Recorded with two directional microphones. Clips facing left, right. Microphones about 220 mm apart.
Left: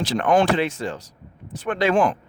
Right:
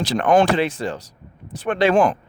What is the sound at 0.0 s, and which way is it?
Speech, 40° right (ahead or behind).